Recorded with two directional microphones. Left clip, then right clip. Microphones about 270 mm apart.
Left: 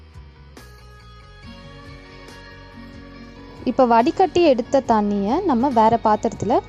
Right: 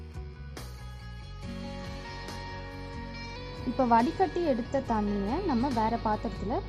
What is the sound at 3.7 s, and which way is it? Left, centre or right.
Speech, left.